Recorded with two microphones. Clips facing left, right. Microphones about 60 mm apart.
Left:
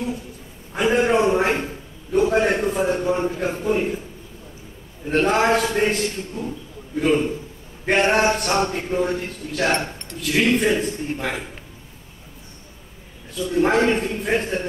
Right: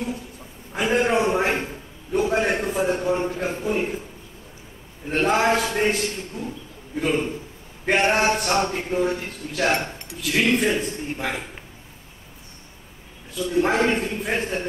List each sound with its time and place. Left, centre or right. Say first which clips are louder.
0.7 s a man's voice: left 2 dB; centre
5.1 s a man's voice: left 2 dB; centre
13.4 s a man's voice: left 2 dB; centre